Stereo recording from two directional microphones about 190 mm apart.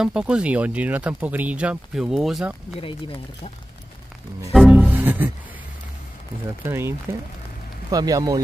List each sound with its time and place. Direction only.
0.0 s speech: 5° right (ahead or behind)
2.8 s speech: 30° left (ahead or behind)
4.5 s music: centre (ahead or behind)
6.6 s speech: 15° right (ahead or behind)